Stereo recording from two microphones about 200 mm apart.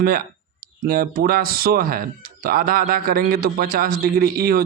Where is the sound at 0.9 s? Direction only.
50° right (ahead or behind).